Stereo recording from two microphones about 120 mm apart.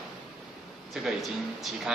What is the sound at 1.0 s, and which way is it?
Speech, centre (ahead or behind).